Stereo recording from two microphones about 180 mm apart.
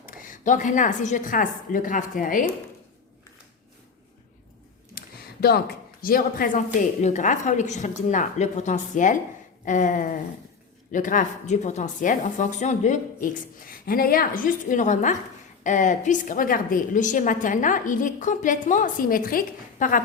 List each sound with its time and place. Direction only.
0.0 s a woman's voice: 50° left (ahead or behind)
4.9 s a sound: 60° left (ahead or behind)
6.7 s a woman's voice: 40° left (ahead or behind)